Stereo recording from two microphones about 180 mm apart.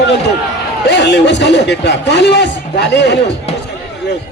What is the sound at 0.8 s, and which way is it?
Speech, 75° left (ahead or behind).